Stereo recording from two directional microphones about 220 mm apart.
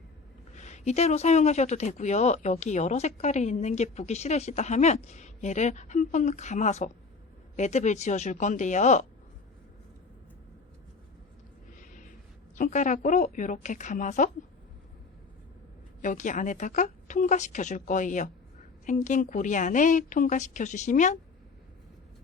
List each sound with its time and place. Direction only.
0.5 s speech: 30° left (ahead or behind)
11.8 s a sound: 35° left (ahead or behind)
12.5 s speech: 35° left (ahead or behind)
16.0 s speech: 35° left (ahead or behind)